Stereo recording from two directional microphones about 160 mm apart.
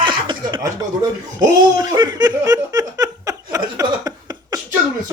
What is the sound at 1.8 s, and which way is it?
Laughter, 25° right (ahead or behind).